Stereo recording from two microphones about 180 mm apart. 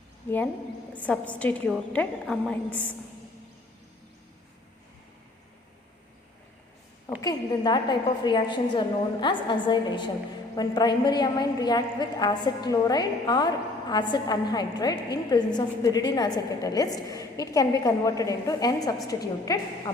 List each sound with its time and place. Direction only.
1.0 s a woman's voice: 10° left (ahead or behind)
7.2 s a woman's voice: 20° left (ahead or behind)